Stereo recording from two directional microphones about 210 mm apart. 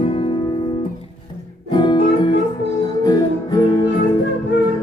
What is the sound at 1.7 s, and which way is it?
Music, 20° left (ahead or behind).